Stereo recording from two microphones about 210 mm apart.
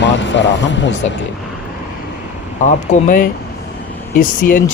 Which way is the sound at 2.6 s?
40° left (ahead or behind).